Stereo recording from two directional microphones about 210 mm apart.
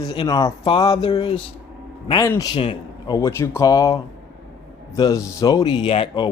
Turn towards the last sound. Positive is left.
turn(degrees=25)  # may be behind; listen again after turning